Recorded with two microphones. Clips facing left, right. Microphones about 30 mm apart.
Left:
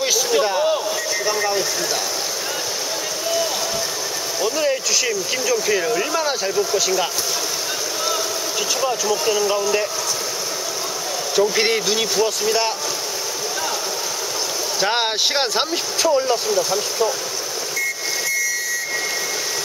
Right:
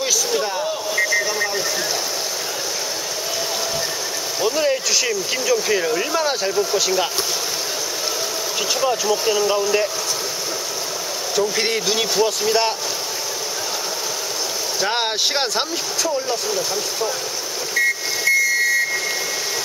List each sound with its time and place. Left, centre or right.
0.0 s a sound: centre
4.4 s speech: centre
8.8 s speech: centre
11.3 s speech: centre
11.8 s speech: centre
14.8 s speech: centre
15.7 s speech: centre
16.4 s speech: centre